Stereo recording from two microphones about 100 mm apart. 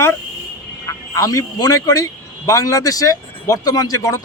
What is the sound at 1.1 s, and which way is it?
Speech, 35° left (ahead or behind).